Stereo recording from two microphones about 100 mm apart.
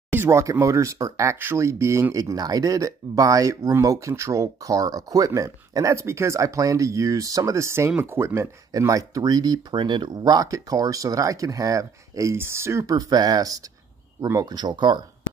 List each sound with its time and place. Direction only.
0.1 s speech: 25° right (ahead or behind); by 15.0 s 45° right (ahead or behind)